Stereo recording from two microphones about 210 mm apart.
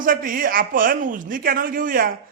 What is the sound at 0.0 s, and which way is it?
A man's voice, 40° right (ahead or behind).